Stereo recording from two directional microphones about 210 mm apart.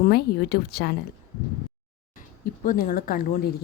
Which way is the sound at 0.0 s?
50° left (ahead or behind).